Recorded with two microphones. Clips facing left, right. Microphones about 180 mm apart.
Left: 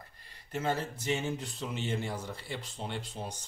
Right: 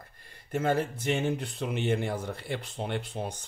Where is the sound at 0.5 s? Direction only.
55° right (ahead or behind).